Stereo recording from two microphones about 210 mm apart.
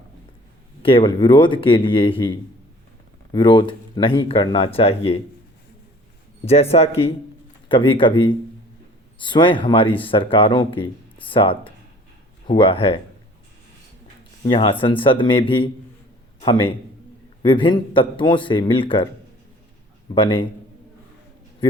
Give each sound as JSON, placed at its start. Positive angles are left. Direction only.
{"t": 0.8, "sound": "speech", "side_deg": 25}
{"t": 6.4, "sound": "speech", "side_deg": 30}
{"t": 14.4, "sound": "speech", "side_deg": 25}
{"t": 20.1, "sound": "speech", "side_deg": 25}